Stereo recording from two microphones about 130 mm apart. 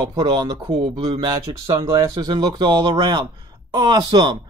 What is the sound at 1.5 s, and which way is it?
Speech, 25° right (ahead or behind).